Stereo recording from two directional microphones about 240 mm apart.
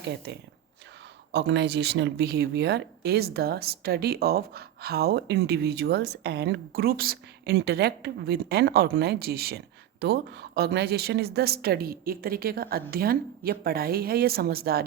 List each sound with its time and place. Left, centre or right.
0.3 s speech: right